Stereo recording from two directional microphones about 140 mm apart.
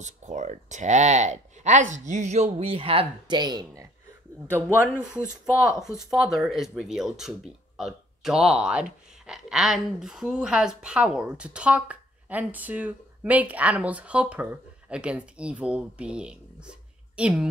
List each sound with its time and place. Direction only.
0.0 s speech: 55° right (ahead or behind); by 3.8 s 30° right (ahead or behind)
4.8 s speech: 5° right (ahead or behind)